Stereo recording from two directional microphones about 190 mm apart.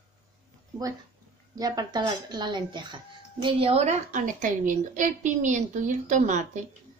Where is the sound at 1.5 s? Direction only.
20° right (ahead or behind); by 6.6 s 40° right (ahead or behind).